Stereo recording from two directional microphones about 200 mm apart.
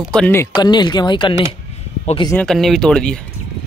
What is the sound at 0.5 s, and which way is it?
Speech, 20° left (ahead or behind).